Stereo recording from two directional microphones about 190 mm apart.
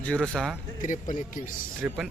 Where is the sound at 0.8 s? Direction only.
45° left (ahead or behind).